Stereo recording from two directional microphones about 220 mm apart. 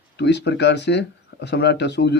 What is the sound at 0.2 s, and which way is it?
Speech, 50° left (ahead or behind).